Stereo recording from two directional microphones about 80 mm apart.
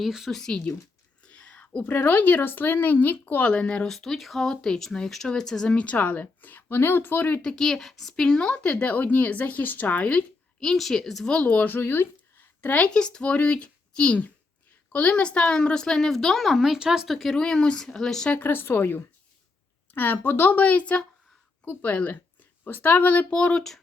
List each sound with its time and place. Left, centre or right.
0.0 s speech: centre
1.2 s a sound: centre
1.9 s speech: left
3.8 s speech: centre; by 7.4 s left
7.4 s speech: centre
10.6 s speech: centre
18.3 s speech: left; by 23.8 s centre